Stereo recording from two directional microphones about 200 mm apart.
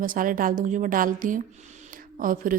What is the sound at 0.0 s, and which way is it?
A woman's voice, 45° right (ahead or behind).